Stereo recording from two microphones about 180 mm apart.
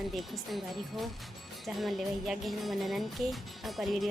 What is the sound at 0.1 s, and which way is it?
Speech, centre (ahead or behind).